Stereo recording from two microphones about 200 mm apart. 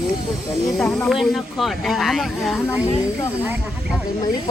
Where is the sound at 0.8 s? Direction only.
5° left (ahead or behind).